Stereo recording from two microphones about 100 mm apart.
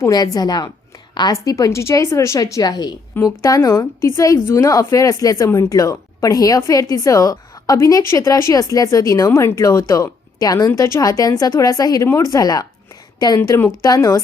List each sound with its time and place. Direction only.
0.0 s a woman's voice: 40° left (ahead or behind)